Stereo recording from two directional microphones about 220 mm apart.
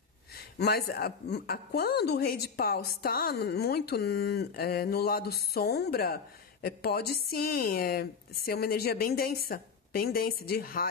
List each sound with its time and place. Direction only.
0.6 s a woman's voice: 45° left (ahead or behind)